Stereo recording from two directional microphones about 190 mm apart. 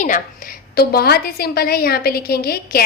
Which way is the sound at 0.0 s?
45° left (ahead or behind).